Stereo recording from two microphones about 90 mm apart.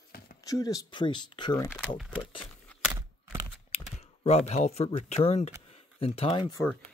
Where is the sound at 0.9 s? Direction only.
60° left (ahead or behind).